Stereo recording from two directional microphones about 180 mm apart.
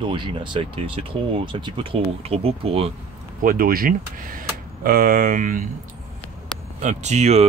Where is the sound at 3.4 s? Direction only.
55° right (ahead or behind).